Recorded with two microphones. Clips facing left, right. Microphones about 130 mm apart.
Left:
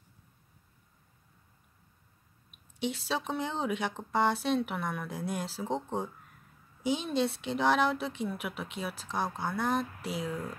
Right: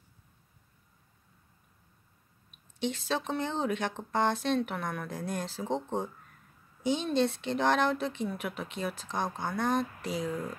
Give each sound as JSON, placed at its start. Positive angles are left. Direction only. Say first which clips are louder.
{"t": 2.8, "sound": "speech", "louder": "right 1 dB", "side_deg": 10}